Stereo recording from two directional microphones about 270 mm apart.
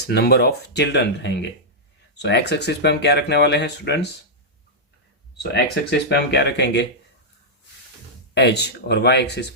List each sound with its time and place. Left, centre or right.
0.0 s speech: left
5.4 s speech: left
8.4 s speech: left